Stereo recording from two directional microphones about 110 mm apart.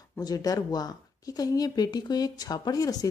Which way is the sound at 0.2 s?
35° left (ahead or behind).